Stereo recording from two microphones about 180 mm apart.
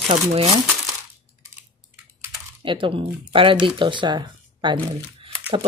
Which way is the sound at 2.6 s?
30° right (ahead or behind).